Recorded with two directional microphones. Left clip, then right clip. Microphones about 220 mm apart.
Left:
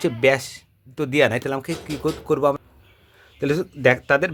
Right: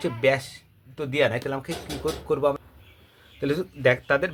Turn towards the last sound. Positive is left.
turn(degrees=45)  # may be behind; listen again after turning